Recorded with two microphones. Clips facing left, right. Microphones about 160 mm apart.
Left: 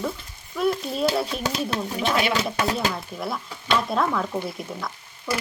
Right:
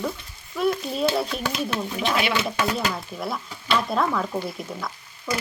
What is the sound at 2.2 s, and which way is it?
Speech, 40° left (ahead or behind).